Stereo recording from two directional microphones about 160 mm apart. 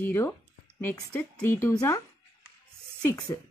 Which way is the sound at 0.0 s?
15° left (ahead or behind).